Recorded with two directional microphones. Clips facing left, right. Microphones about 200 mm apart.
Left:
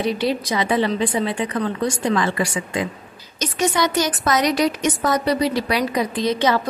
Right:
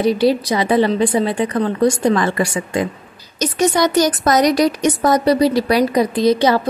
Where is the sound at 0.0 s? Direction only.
35° right (ahead or behind).